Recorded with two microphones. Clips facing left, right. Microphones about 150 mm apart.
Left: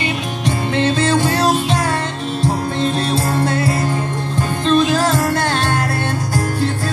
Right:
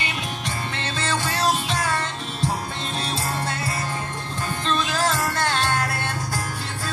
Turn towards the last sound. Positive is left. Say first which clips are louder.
# left 7 dB
turn(degrees=30)  # may be behind; listen again after turning